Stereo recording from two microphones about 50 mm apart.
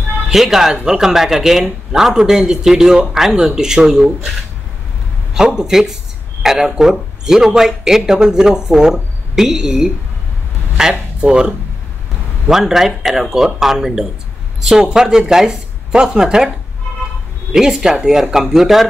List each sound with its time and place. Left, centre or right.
0.3 s speech: centre
5.3 s speech: centre